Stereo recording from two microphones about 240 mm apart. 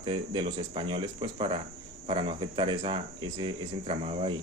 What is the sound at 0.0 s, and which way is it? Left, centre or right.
A man's voice, centre.